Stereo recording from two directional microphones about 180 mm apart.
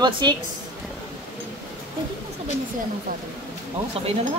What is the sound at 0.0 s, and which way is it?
Speech, 25° right (ahead or behind).